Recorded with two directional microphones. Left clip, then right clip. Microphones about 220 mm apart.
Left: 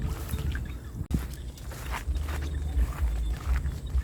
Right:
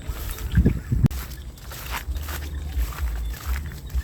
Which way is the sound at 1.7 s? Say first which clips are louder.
Right 5 dB; 20° right (ahead or behind).